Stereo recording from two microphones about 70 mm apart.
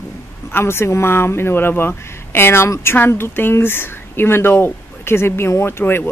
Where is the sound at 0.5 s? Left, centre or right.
Left.